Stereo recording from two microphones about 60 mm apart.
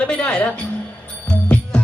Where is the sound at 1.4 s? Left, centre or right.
Left.